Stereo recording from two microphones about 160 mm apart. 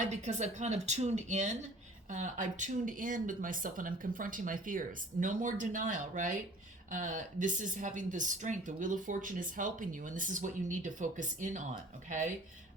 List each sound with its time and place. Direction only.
0.1 s speech: 45° right (ahead or behind)